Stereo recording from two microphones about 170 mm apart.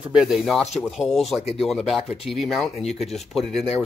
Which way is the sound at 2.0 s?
35° left (ahead or behind).